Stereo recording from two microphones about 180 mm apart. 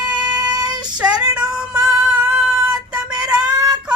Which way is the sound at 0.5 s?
20° right (ahead or behind).